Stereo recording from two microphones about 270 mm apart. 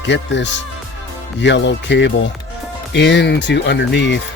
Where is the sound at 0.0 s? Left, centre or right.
Left.